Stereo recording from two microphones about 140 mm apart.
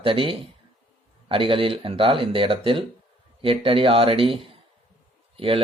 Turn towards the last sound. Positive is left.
turn(degrees=-40)  # may be behind; listen again after turning